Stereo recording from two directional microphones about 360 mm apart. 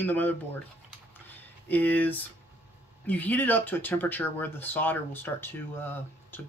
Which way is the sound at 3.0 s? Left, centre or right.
Centre.